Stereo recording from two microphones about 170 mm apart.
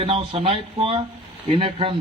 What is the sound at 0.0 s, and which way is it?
A man's voice, 35° right (ahead or behind).